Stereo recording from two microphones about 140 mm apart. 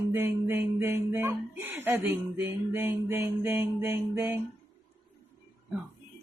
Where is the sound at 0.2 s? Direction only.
15° right (ahead or behind).